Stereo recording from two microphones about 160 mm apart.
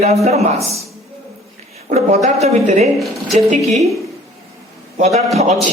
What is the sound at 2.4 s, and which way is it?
Speech, 45° right (ahead or behind).